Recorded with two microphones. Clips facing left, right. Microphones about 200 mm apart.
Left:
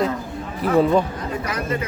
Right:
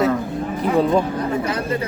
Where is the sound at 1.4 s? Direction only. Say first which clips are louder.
Right 2 dB; 30° right (ahead or behind).